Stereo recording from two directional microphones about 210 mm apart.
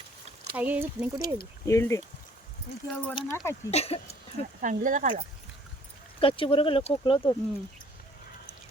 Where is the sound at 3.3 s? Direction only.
10° left (ahead or behind).